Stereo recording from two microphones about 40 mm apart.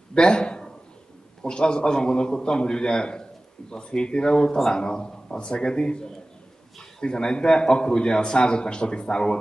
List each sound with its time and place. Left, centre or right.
0.1 s a man's voice: left